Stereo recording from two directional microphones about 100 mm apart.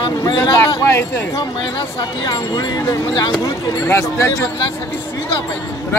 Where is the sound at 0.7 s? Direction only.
25° left (ahead or behind).